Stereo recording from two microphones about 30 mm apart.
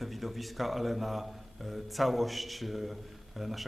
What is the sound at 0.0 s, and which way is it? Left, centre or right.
A man's voice, centre.